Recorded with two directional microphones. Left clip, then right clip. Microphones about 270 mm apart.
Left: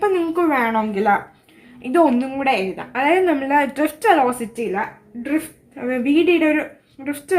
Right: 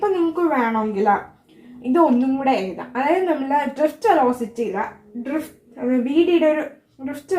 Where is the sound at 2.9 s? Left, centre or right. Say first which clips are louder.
Left 2 dB; left.